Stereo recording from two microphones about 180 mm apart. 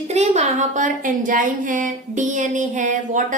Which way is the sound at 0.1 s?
35° right (ahead or behind).